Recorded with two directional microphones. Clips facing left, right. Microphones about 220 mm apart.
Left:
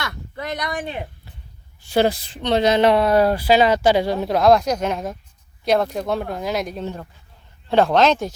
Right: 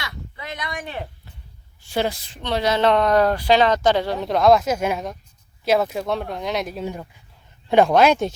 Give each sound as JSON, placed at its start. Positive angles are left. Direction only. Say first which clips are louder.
{"t": 0.0, "sound": "a sound", "louder": "left 6 dB", "side_deg": 50}
{"t": 0.9, "sound": "speech", "louder": "left 2 dB", "side_deg": 15}
{"t": 2.0, "sound": "speech", "louder": "left 5 dB", "side_deg": 35}
{"t": 2.4, "sound": "speech", "louder": "left 4 dB", "side_deg": 20}
{"t": 4.3, "sound": "speech", "louder": "even", "side_deg": 0}